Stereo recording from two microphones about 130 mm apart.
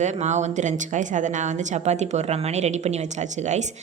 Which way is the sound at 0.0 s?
60° right (ahead or behind).